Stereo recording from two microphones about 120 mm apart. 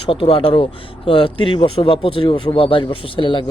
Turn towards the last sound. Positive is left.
turn(degrees=45)  # may be behind; listen again after turning